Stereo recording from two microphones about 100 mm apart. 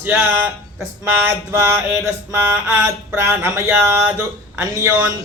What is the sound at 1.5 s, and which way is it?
Mantra, 20° right (ahead or behind).